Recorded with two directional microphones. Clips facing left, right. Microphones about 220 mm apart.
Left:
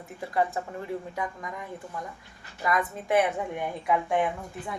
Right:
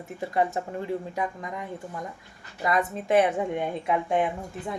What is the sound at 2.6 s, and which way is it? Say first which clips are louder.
A woman's voice: right 2 dB; 25° right (ahead or behind).